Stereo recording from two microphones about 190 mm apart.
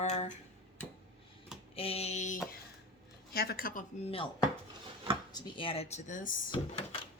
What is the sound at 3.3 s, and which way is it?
Speech, 55° left (ahead or behind).